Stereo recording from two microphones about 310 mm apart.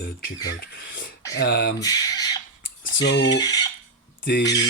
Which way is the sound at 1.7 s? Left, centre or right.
Centre.